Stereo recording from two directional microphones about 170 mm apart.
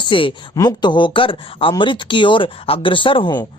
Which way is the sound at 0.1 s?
30° left (ahead or behind).